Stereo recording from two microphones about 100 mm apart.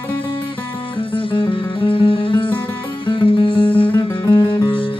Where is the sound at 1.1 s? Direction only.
60° left (ahead or behind).